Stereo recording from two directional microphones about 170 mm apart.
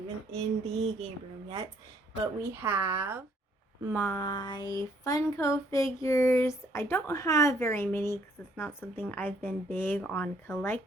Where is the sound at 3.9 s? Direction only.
5° left (ahead or behind).